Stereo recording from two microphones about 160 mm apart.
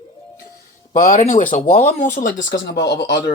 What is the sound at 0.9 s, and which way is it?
Speech, 55° left (ahead or behind).